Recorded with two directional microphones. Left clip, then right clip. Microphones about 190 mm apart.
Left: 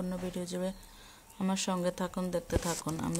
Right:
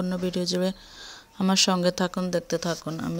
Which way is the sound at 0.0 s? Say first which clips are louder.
Right 10 dB; 30° right (ahead or behind).